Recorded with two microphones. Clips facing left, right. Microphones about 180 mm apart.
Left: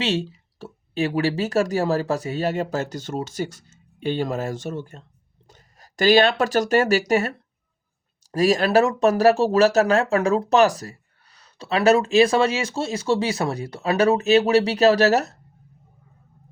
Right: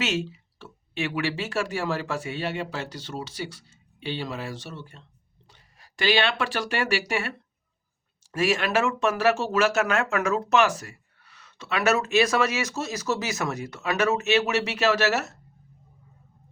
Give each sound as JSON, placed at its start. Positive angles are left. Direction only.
{"t": 0.0, "sound": "speech", "side_deg": 35}